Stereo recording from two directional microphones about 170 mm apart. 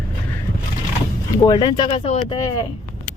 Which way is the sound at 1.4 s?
25° left (ahead or behind).